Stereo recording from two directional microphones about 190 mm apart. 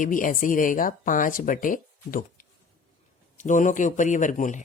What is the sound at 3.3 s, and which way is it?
A man's voice, 40° left (ahead or behind).